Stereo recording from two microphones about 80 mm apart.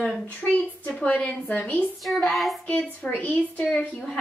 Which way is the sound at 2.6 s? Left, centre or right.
Centre.